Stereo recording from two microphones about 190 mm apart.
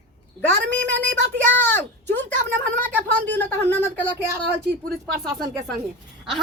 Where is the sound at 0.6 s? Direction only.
70° right (ahead or behind).